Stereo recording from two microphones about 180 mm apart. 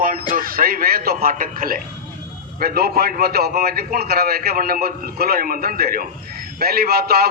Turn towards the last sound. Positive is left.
turn(degrees=-60)  # may be behind; listen again after turning